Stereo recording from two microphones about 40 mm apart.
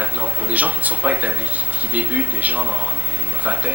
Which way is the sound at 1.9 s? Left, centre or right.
Right.